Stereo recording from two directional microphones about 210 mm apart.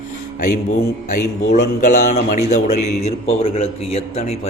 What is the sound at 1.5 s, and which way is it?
A man's voice, 35° left (ahead or behind).